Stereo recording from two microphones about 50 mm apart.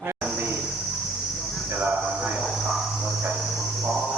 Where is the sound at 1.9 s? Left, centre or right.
Right.